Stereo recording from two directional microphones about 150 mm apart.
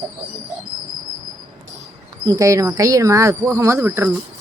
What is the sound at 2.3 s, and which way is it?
Speech, 20° right (ahead or behind).